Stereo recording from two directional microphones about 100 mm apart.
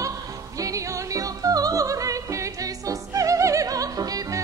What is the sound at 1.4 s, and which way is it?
Opera, 35° right (ahead or behind).